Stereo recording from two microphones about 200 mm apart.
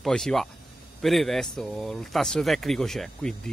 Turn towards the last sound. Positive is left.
turn(degrees=5)  # may be behind; listen again after turning